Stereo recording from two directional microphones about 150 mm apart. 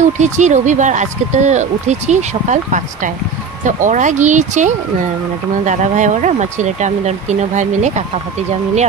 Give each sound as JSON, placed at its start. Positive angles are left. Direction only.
{"t": 0.0, "sound": "speech", "side_deg": -50}